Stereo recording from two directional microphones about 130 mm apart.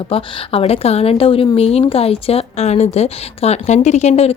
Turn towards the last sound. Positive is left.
turn(degrees=50)  # may be behind; listen again after turning